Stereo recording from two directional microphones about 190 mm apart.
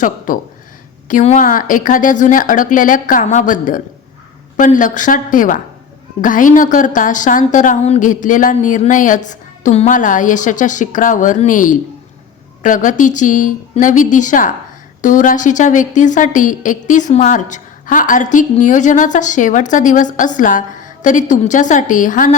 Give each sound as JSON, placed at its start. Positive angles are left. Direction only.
{"t": 0.3, "sound": "a woman's voice", "side_deg": 45}